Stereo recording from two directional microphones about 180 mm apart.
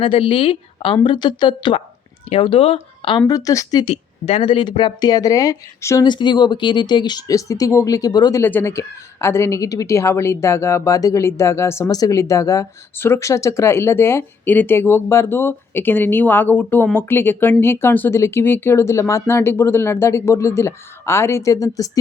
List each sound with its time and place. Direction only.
0.0 s speech: 30° left (ahead or behind)
3.8 s speech: 35° left (ahead or behind); by 21.8 s 20° left (ahead or behind)